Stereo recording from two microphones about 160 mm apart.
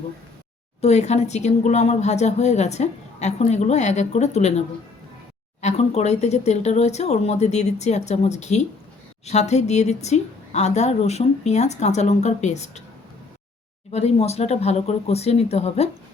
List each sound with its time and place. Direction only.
0.8 s speech: 45° left (ahead or behind)
5.6 s speech: 45° left (ahead or behind)
13.9 s speech: 40° left (ahead or behind)